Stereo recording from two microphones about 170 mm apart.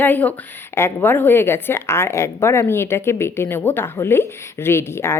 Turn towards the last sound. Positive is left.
turn(degrees=15)  # may be behind; listen again after turning